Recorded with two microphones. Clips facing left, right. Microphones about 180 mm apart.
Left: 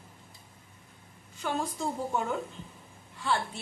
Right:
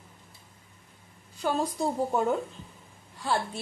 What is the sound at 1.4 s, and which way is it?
Speech, 35° right (ahead or behind).